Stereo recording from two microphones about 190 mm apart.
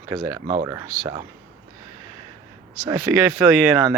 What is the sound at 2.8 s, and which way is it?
Speech, 15° right (ahead or behind).